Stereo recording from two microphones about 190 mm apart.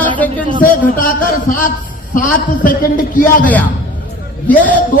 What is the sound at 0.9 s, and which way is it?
A man's voice, 45° left (ahead or behind).